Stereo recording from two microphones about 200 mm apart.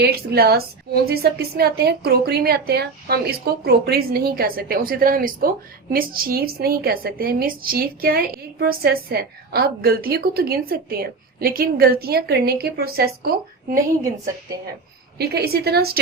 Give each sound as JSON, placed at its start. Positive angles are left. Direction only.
{"t": 0.0, "sound": "a woman's voice", "side_deg": -55}
{"t": 15.2, "sound": "a woman's voice", "side_deg": -50}